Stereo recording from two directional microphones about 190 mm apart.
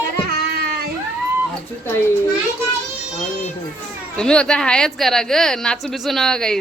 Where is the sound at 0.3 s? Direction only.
55° right (ahead or behind).